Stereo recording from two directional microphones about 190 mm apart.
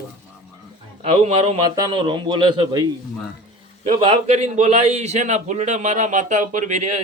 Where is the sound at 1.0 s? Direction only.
30° right (ahead or behind).